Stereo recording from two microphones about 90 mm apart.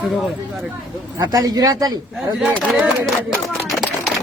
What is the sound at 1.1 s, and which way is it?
Speech, 45° right (ahead or behind).